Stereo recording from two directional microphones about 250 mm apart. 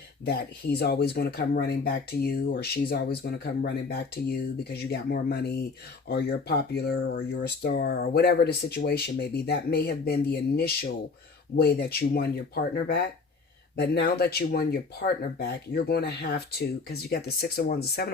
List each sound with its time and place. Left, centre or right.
0.3 s speech: left
13.7 s speech: left